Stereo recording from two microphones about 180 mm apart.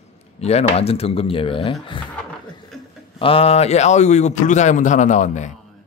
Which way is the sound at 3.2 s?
30° left (ahead or behind).